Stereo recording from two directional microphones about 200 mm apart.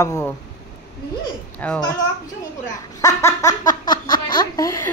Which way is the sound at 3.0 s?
15° left (ahead or behind).